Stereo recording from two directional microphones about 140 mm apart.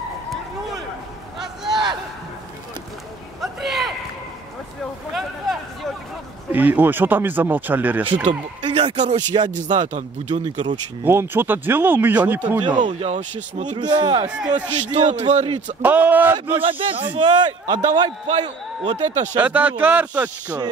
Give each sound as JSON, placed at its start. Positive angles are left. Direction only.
{"t": 1.4, "sound": "a sound", "side_deg": -5}
{"t": 3.3, "sound": "a sound", "side_deg": 0}
{"t": 6.5, "sound": "speech", "side_deg": -15}
{"t": 8.6, "sound": "speech", "side_deg": -45}
{"t": 10.3, "sound": "a man's voice", "side_deg": -35}
{"t": 11.1, "sound": "speech", "side_deg": -15}
{"t": 12.5, "sound": "a man's voice", "side_deg": -35}
{"t": 12.8, "sound": "speech", "side_deg": -55}
{"t": 13.7, "sound": "a man's voice", "side_deg": -30}
{"t": 14.5, "sound": "a man's voice", "side_deg": -55}
{"t": 15.8, "sound": "speech", "side_deg": -15}
{"t": 16.6, "sound": "a man's voice", "side_deg": -40}
{"t": 18.9, "sound": "speech", "side_deg": -55}
{"t": 19.3, "sound": "speech", "side_deg": -15}